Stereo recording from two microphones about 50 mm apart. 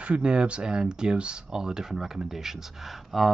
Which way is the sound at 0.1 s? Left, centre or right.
Centre.